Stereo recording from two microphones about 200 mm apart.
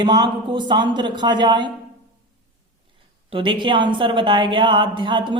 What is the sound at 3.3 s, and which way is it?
Speech, 25° right (ahead or behind).